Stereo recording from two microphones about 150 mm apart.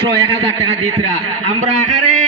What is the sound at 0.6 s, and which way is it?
A man's voice, 45° right (ahead or behind).